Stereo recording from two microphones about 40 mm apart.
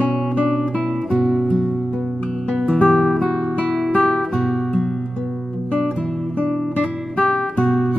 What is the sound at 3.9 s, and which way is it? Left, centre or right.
Guitar, centre.